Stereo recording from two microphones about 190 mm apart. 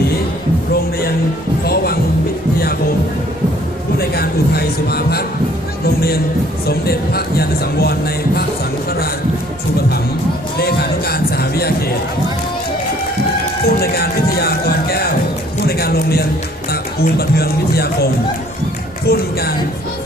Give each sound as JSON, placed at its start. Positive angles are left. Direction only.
{"t": 1.6, "sound": "music", "side_deg": 55}
{"t": 3.9, "sound": "a sound", "side_deg": 55}
{"t": 5.8, "sound": "music", "side_deg": 55}
{"t": 6.7, "sound": "speech", "side_deg": 55}
{"t": 10.6, "sound": "speech", "side_deg": 55}
{"t": 13.7, "sound": "music", "side_deg": 55}
{"t": 15.6, "sound": "a sound", "side_deg": 55}
{"t": 17.0, "sound": "speech", "side_deg": 55}